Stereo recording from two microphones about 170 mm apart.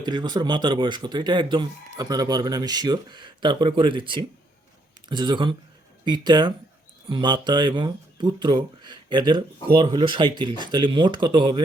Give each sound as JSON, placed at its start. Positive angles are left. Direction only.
{"t": 0.0, "sound": "speech", "side_deg": -25}